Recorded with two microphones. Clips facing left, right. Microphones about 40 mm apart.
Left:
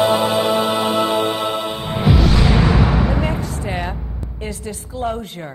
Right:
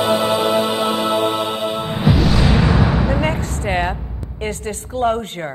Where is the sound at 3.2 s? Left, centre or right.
Right.